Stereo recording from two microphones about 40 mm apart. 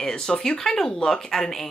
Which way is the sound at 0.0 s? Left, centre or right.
Centre.